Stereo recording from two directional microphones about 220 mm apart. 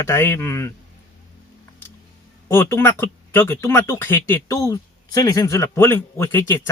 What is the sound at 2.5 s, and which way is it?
Speech, 10° left (ahead or behind).